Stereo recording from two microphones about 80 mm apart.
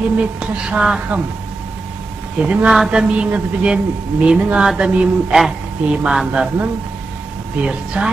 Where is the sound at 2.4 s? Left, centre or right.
Centre.